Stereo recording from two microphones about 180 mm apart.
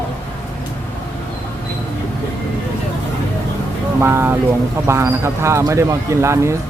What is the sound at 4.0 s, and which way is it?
Speech, 10° right (ahead or behind).